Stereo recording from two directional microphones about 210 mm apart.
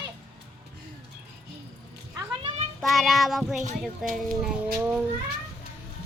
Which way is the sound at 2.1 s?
25° right (ahead or behind).